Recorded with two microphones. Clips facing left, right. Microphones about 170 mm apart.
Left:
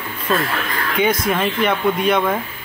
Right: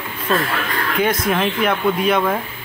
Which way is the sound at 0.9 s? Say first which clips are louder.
Left 1 dB; centre (ahead or behind).